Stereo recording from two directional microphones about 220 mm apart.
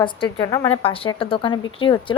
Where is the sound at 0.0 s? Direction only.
20° left (ahead or behind).